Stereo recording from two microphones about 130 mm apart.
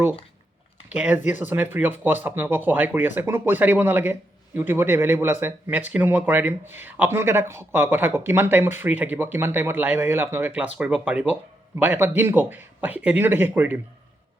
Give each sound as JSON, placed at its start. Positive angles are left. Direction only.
{"t": 0.9, "sound": "speech", "side_deg": -10}